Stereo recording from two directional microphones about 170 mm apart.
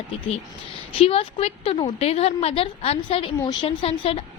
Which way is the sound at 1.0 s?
35° left (ahead or behind).